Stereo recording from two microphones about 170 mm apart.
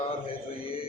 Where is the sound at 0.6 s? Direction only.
35° left (ahead or behind).